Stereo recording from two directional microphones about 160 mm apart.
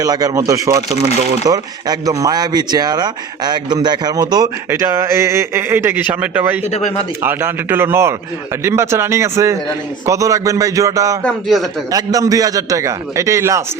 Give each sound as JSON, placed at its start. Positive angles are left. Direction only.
{"t": 0.0, "sound": "speech", "side_deg": -25}
{"t": 6.7, "sound": "speech", "side_deg": 45}
{"t": 7.2, "sound": "speech", "side_deg": -15}
{"t": 11.2, "sound": "a man's voice", "side_deg": 0}
{"t": 11.9, "sound": "speech", "side_deg": -20}